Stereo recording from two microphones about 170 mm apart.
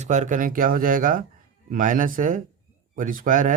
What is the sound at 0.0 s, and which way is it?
Speech, 45° right (ahead or behind).